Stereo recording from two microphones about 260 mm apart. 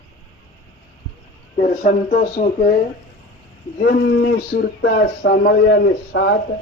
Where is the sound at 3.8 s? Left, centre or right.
Left.